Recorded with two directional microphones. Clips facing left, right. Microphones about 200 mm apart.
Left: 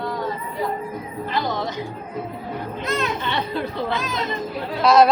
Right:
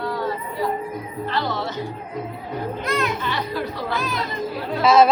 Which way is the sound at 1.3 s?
15° left (ahead or behind).